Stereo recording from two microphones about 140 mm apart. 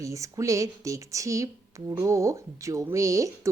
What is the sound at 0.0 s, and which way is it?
A woman's voice, 20° right (ahead or behind).